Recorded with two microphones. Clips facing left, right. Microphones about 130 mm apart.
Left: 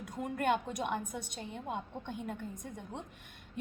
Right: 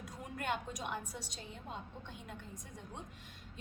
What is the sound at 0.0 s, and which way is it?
A woman's voice, 55° left (ahead or behind).